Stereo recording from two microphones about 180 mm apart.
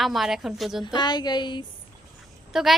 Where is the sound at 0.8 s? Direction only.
25° left (ahead or behind).